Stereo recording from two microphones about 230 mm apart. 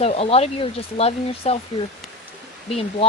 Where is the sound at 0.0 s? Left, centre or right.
Left.